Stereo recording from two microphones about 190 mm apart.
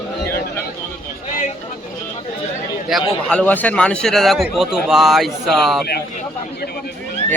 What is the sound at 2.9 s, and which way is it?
A man's voice, centre (ahead or behind).